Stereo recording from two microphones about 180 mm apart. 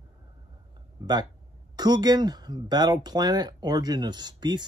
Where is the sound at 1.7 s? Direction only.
20° right (ahead or behind).